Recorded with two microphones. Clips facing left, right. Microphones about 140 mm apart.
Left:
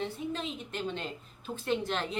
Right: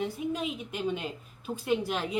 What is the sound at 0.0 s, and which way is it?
A woman's voice, 10° right (ahead or behind).